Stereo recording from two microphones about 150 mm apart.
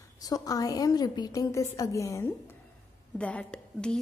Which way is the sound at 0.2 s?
25° left (ahead or behind).